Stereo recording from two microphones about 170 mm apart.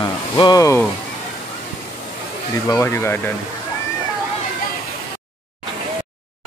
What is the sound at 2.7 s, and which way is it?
Speech, 15° left (ahead or behind).